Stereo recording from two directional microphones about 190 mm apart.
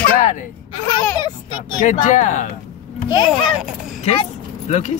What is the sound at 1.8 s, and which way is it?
Speech, 40° left (ahead or behind).